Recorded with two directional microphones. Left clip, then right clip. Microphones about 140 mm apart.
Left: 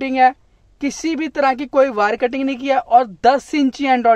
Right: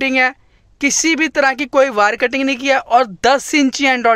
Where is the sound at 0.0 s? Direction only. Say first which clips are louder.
Left 1 dB; 5° right (ahead or behind).